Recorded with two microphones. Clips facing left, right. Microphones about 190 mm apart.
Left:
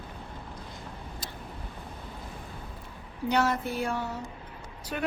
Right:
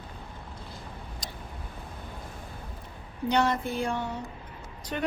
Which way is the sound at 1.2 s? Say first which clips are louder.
Even; 5° left (ahead or behind).